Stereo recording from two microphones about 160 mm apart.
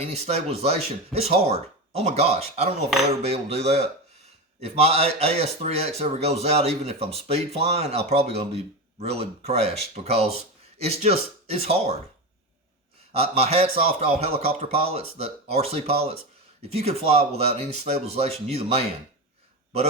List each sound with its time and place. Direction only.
0.0 s speech: 40° right (ahead or behind)
13.1 s speech: 40° right (ahead or behind)